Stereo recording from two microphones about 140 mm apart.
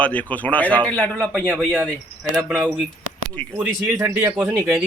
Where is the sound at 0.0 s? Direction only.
10° left (ahead or behind).